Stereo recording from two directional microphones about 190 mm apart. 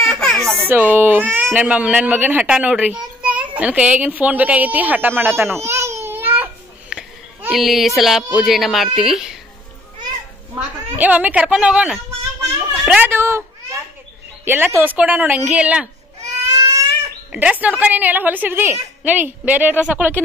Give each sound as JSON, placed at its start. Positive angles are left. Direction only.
{"t": 0.1, "sound": "crying", "side_deg": 0}
{"t": 0.4, "sound": "baby cry", "side_deg": -10}
{"t": 1.3, "sound": "speech", "side_deg": -10}
{"t": 5.7, "sound": "babbling", "side_deg": -15}
{"t": 8.4, "sound": "a child's voice", "side_deg": 0}
{"t": 11.0, "sound": "a child's voice", "side_deg": -10}
{"t": 16.5, "sound": "a sound", "side_deg": -15}
{"t": 17.3, "sound": "speech", "side_deg": -5}